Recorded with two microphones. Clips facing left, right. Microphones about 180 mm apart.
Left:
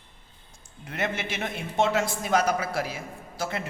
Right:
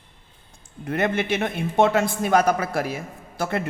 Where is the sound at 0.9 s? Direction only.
55° right (ahead or behind).